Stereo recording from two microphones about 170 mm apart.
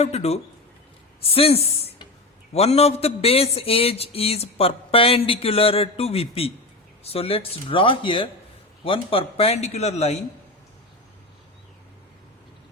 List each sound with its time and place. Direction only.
0.0 s a man's voice: 40° left (ahead or behind)